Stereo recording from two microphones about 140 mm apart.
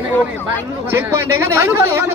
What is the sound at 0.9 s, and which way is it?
A man's voice, 15° right (ahead or behind).